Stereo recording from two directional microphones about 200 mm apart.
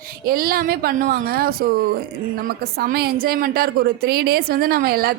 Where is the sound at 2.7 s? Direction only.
50° right (ahead or behind).